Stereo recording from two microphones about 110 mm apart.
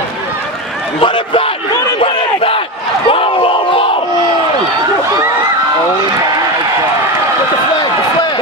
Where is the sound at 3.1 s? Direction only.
55° left (ahead or behind).